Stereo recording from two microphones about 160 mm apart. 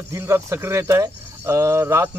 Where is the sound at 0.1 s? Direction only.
15° right (ahead or behind).